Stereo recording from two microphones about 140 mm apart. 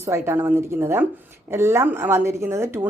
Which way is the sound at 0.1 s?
15° right (ahead or behind).